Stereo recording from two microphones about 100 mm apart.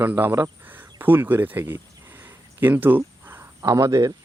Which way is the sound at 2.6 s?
20° right (ahead or behind).